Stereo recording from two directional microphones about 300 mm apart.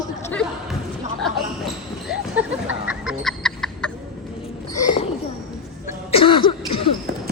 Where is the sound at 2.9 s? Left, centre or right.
Centre.